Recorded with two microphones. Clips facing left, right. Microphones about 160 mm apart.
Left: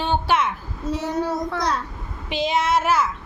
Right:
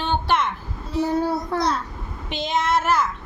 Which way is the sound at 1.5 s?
40° right (ahead or behind).